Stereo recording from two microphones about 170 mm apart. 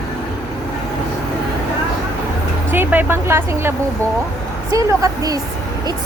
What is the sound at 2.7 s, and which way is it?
Speech, 10° right (ahead or behind).